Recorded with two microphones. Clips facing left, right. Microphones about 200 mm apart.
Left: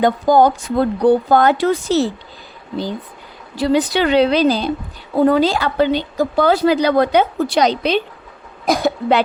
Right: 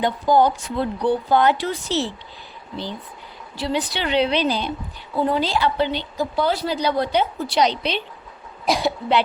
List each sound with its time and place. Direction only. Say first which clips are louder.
0.0 s speech: left 5 dB; 45° left (ahead or behind)
3.5 s speech: left 9 dB; 45° left (ahead or behind)